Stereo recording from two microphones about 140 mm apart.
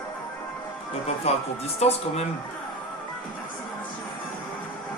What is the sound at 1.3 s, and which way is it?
Speech, 45° left (ahead or behind).